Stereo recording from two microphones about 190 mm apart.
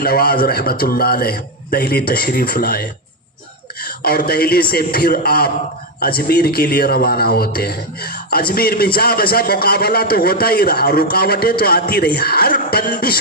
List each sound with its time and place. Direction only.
0.0 s a man's voice: 55° left (ahead or behind)
4.0 s a man's voice: 55° left (ahead or behind)